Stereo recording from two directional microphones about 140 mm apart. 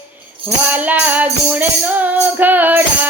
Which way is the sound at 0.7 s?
10° right (ahead or behind).